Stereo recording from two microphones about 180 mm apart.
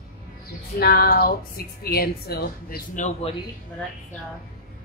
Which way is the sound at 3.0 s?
30° left (ahead or behind).